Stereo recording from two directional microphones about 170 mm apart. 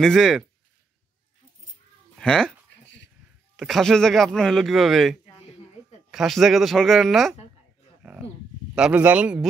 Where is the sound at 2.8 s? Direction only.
90° left.